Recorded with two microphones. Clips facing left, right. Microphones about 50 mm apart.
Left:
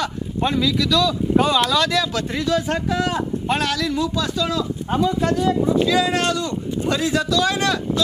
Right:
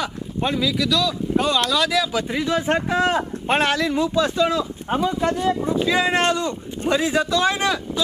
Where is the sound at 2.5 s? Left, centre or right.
Right.